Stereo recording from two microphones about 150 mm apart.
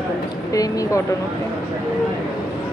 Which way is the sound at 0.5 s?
25° left (ahead or behind).